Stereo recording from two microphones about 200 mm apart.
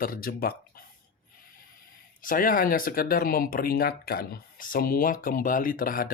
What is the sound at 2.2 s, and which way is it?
Speech, 45° left (ahead or behind).